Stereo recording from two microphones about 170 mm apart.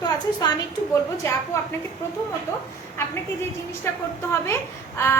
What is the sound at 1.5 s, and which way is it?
Speech, 15° left (ahead or behind).